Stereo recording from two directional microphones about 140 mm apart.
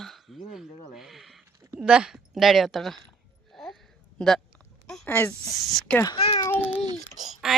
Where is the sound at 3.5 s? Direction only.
Centre (ahead or behind).